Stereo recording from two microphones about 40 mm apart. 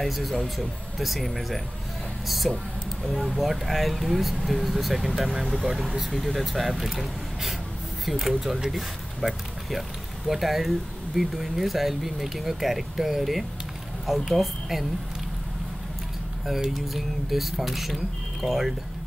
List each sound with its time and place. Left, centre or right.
0.0 s speech: centre
2.2 s a sound: centre
3.2 s speech: centre
6.1 s speech: centre
16.7 s speech: centre